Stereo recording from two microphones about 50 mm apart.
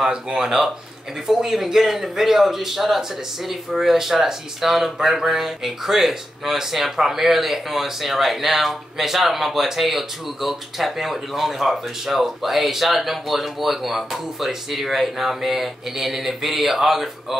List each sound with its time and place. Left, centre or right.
0.0 s a man's voice: centre